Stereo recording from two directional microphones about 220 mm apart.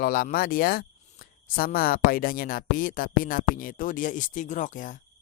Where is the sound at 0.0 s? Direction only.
40° left (ahead or behind).